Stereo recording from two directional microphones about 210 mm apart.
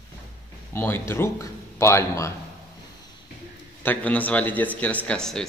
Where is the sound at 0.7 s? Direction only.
10° left (ahead or behind).